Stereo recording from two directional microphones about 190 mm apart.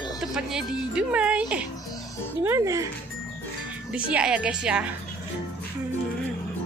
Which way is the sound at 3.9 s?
5° right (ahead or behind).